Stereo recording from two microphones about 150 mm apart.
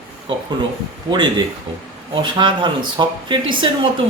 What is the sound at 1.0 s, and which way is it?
A woman's voice, 30° right (ahead or behind).